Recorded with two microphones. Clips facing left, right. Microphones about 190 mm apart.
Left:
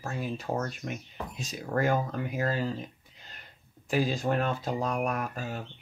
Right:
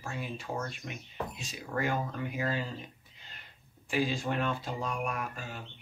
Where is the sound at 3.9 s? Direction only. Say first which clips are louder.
Left 4 dB; 40° left (ahead or behind).